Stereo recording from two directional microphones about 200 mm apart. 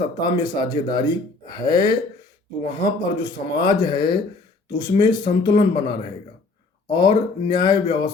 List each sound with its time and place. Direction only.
0.2 s speech: 20° left (ahead or behind)